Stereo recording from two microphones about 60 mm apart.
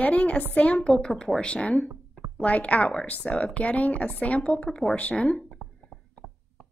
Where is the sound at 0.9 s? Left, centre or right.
Centre.